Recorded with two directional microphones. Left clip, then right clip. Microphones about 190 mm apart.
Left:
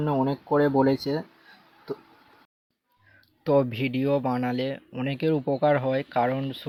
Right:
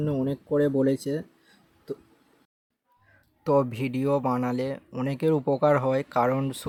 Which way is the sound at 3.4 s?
5° right (ahead or behind).